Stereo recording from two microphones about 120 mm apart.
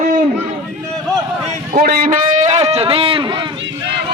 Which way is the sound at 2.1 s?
75° right (ahead or behind).